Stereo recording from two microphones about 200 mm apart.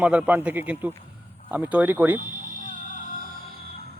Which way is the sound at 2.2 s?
40° right (ahead or behind).